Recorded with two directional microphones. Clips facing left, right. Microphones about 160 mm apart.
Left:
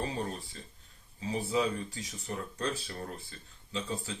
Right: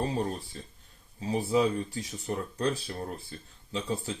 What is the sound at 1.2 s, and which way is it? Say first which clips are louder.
Speech: right 5 dB; 40° right (ahead or behind).